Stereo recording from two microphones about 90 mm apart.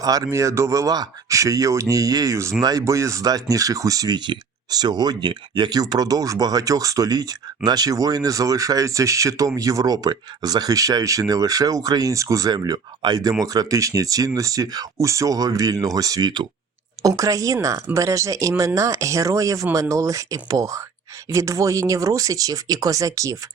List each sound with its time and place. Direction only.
0.0 s speech: 45° right (ahead or behind)
4.2 s speech: 55° right (ahead or behind)
5.8 s speech: 45° right (ahead or behind)
12.5 s speech: 50° right (ahead or behind)
17.0 s speech: 40° right (ahead or behind)